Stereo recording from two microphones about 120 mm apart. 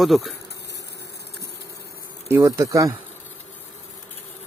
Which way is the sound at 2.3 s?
25° right (ahead or behind).